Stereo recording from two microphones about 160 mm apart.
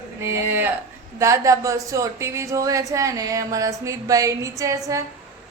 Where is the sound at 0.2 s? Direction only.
15° right (ahead or behind).